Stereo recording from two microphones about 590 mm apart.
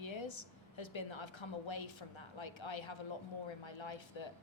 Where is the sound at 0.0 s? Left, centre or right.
Left.